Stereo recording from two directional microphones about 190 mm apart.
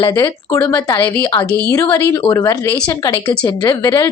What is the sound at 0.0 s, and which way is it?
Speech, 15° left (ahead or behind).